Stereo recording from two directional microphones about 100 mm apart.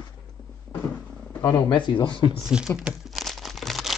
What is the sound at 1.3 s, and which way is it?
Speech, 25° left (ahead or behind).